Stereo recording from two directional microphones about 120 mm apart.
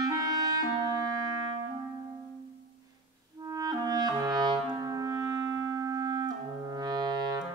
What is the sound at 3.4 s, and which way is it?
Clarinet, 30° right (ahead or behind).